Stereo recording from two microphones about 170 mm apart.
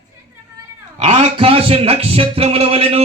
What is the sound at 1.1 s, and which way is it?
Speech, 35° right (ahead or behind).